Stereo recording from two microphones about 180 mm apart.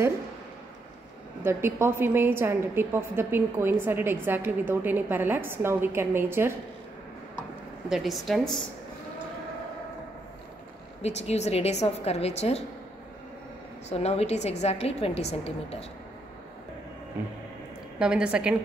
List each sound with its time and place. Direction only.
1.4 s a woman's voice: 15° right (ahead or behind)
7.9 s speech: centre (ahead or behind)
11.0 s a woman's voice: 35° left (ahead or behind)
13.8 s a woman's voice: 35° left (ahead or behind)
17.9 s speech: 5° right (ahead or behind)